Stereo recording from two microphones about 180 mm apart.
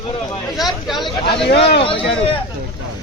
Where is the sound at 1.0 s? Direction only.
30° left (ahead or behind).